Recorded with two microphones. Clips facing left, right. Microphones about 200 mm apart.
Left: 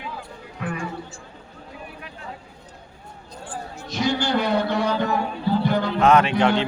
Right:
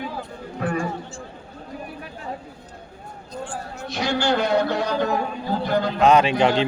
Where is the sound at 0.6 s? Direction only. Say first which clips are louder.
Right 5 dB; 40° right (ahead or behind).